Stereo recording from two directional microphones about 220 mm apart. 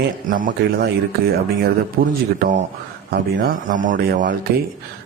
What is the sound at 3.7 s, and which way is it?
Speech, 35° right (ahead or behind).